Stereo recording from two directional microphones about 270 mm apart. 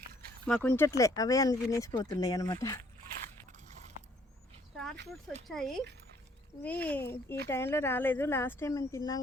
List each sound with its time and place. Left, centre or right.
0.4 s speech: centre
3.7 s a sound: right
5.5 s speech: centre